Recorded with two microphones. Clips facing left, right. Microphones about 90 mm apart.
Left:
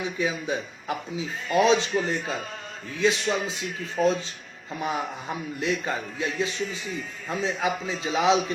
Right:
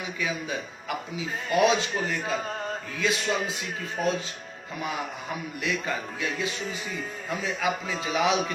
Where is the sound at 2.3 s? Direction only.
40° right (ahead or behind).